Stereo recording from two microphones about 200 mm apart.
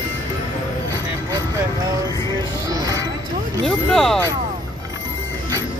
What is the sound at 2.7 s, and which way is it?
Music, 20° right (ahead or behind).